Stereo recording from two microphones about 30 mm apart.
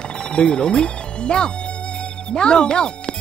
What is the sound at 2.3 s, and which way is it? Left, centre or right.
Speech, left.